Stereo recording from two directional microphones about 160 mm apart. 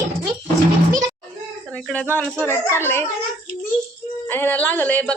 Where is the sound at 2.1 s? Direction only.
10° left (ahead or behind).